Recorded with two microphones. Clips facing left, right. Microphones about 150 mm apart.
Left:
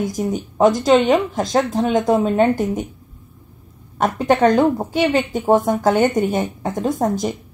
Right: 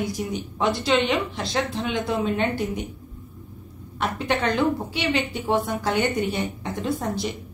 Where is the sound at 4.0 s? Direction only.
45° left (ahead or behind).